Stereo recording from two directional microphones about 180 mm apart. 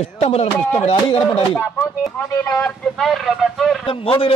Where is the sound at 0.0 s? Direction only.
35° left (ahead or behind).